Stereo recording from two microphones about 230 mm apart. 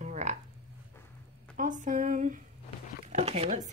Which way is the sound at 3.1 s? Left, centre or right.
Right.